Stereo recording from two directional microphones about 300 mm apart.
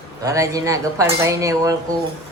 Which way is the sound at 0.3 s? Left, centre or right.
Centre.